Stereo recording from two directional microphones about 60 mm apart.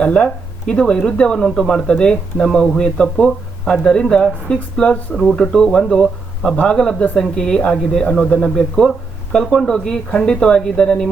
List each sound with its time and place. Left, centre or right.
0.0 s speech: centre
5.1 s speech: centre
5.4 s speech: centre